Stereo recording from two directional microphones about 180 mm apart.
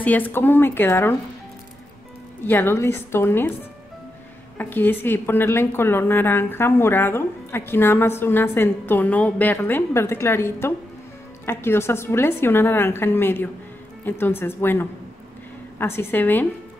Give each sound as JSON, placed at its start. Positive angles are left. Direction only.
{"t": 0.0, "sound": "a woman's voice", "side_deg": 10}
{"t": 2.4, "sound": "a woman's voice", "side_deg": 15}
{"t": 4.6, "sound": "a woman's voice", "side_deg": 10}